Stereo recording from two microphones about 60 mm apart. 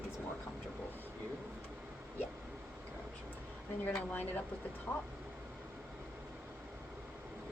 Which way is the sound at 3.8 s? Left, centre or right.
Left.